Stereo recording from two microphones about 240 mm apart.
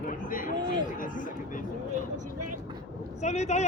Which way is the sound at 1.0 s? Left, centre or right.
Left.